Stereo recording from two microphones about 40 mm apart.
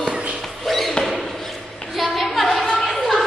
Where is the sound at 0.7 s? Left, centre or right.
Centre.